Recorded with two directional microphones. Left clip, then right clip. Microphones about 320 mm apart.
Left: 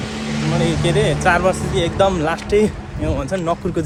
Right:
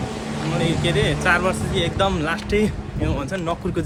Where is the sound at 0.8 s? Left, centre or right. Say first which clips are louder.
Left 5 dB; centre.